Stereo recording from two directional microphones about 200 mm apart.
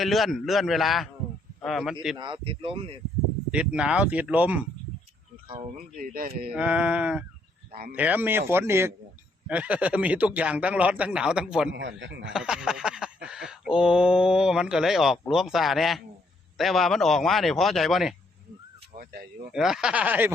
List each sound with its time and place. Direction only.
0.0 s speech: centre (ahead or behind)
2.1 s speech: 25° right (ahead or behind)
3.5 s speech: 5° right (ahead or behind)
5.5 s speech: 25° right (ahead or behind)
6.0 s speech: 45° right (ahead or behind)
6.5 s speech: 5° right (ahead or behind)
11.7 s speech: 65° right (ahead or behind)
12.3 s speech: 5° right (ahead or behind)
18.9 s speech: 50° right (ahead or behind)
19.5 s speech: centre (ahead or behind)